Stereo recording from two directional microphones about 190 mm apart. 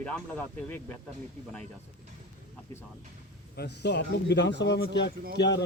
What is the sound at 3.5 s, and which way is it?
A man's voice, 60° left (ahead or behind).